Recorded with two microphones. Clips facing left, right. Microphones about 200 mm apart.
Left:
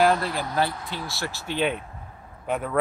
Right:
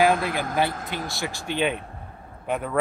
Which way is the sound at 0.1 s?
50° right (ahead or behind).